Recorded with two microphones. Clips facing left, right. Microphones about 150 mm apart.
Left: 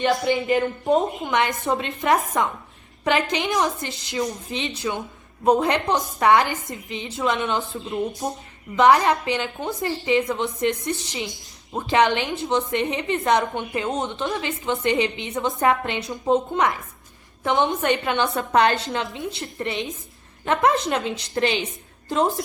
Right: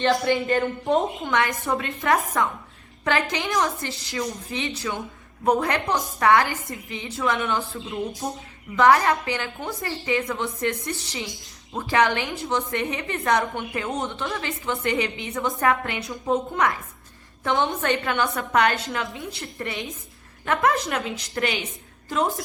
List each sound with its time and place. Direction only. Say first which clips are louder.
0.0 s speech: even; 15° left (ahead or behind)
0.4 s speech: left 2 dB; centre (ahead or behind)
1.2 s a woman's voice: left 2 dB; 20° left (ahead or behind)